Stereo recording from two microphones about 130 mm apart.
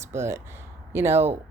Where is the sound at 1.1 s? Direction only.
55° right (ahead or behind).